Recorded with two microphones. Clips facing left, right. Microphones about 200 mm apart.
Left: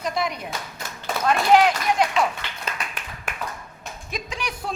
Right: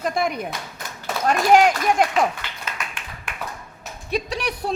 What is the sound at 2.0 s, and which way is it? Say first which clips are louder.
Speech: right 1 dB; 50° right (ahead or behind).